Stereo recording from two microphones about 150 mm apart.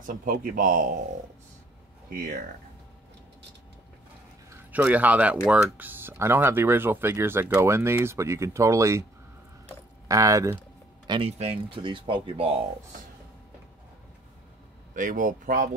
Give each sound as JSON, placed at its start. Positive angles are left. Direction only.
{"t": 0.0, "sound": "a man's voice", "side_deg": -70}
{"t": 2.0, "sound": "speech", "side_deg": -80}
{"t": 4.5, "sound": "speech", "side_deg": -10}
{"t": 10.0, "sound": "speech", "side_deg": -20}
{"t": 11.1, "sound": "speech", "side_deg": -40}
{"t": 15.0, "sound": "speech", "side_deg": -65}